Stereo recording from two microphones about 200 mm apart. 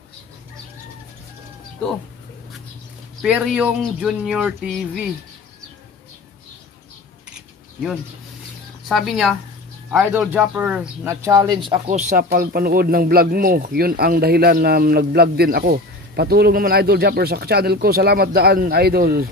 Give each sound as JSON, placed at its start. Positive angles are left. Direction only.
{"t": 3.2, "sound": "speech", "side_deg": -5}
{"t": 8.8, "sound": "speech", "side_deg": 0}
{"t": 11.7, "sound": "speech", "side_deg": -35}